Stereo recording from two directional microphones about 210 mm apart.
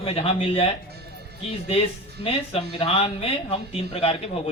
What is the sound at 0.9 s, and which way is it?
Music, 50° right (ahead or behind).